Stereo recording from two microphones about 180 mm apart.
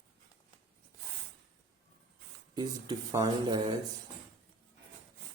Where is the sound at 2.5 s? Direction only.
20° right (ahead or behind).